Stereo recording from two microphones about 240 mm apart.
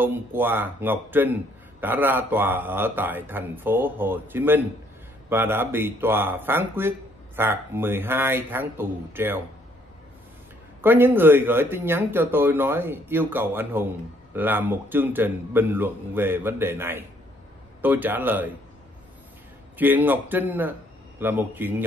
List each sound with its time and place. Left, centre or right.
0.0 s speech: centre
10.8 s speech: centre
19.8 s speech: centre